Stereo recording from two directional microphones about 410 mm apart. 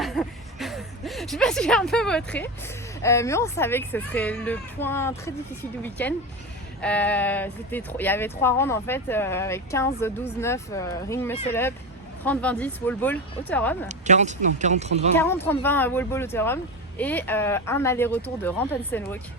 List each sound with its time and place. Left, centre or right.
0.0 s a woman's voice: centre
13.8 s speech: centre
15.2 s speech: centre